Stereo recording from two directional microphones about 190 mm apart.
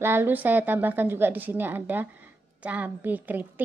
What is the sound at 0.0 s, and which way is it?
A woman's voice, 10° right (ahead or behind).